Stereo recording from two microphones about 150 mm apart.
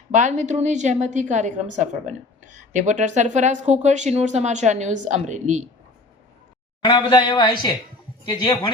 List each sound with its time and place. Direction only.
0.1 s a woman's voice: 55° right (ahead or behind)
6.8 s speech: 30° left (ahead or behind)